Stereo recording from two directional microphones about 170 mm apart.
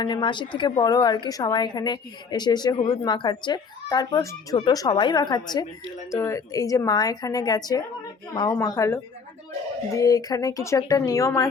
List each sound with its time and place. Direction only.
0.0 s a woman's voice: 25° left (ahead or behind)